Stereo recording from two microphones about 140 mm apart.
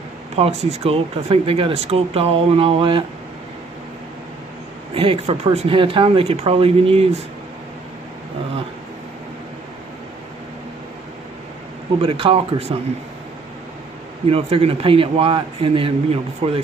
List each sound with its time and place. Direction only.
0.4 s speech: 50° right (ahead or behind)
4.9 s speech: 40° right (ahead or behind)
12.0 s speech: 40° right (ahead or behind)
14.2 s speech: 45° right (ahead or behind)